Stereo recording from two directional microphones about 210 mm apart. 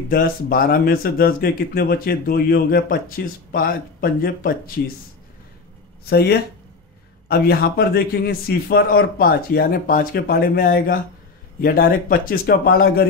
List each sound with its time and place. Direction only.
0.1 s speech: 45° left (ahead or behind)
6.0 s speech: 50° left (ahead or behind)